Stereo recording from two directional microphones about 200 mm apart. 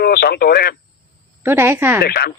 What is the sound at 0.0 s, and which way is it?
Radio, 50° left (ahead or behind).